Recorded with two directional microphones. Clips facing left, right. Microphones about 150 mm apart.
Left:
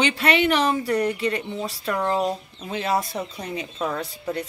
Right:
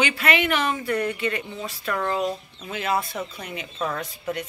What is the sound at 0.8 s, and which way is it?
Speech, 35° left (ahead or behind).